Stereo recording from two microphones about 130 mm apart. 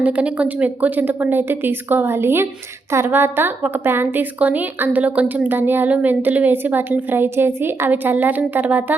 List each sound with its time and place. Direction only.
0.0 s a woman's voice: 10° right (ahead or behind)